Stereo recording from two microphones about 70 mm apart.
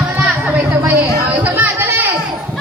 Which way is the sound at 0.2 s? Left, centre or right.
Centre.